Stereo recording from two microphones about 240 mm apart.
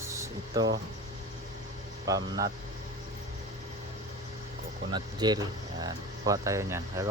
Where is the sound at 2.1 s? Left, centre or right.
Centre.